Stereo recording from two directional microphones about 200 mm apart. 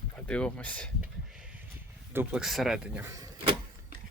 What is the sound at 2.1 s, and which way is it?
Speech, 5° right (ahead or behind).